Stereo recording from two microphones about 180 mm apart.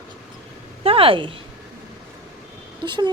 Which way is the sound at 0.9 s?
30° right (ahead or behind).